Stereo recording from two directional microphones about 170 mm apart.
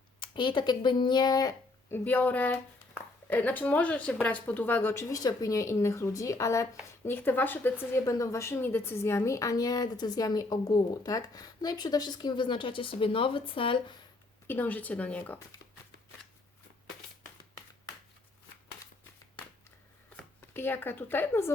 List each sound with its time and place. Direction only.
0.2 s a woman's voice: 25° left (ahead or behind)
14.4 s speech: 10° left (ahead or behind)
20.1 s speech: 10° left (ahead or behind)